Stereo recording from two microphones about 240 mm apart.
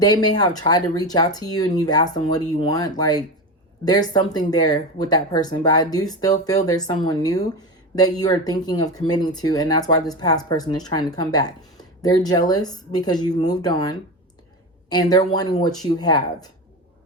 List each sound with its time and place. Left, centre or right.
0.0 s speech: centre